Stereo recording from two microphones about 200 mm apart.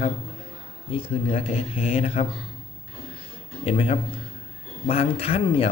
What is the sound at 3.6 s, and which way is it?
Speech, 30° left (ahead or behind).